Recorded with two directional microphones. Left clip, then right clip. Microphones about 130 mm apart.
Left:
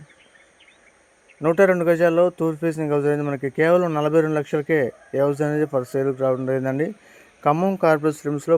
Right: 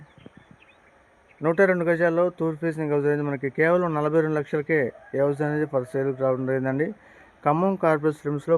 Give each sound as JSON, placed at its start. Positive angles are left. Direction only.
{"t": 1.5, "sound": "a man's voice", "side_deg": 50}
{"t": 2.4, "sound": "speech", "side_deg": 35}
{"t": 2.6, "sound": "a man's voice", "side_deg": 45}
{"t": 3.8, "sound": "speech", "side_deg": 35}
{"t": 4.2, "sound": "a man's voice", "side_deg": 50}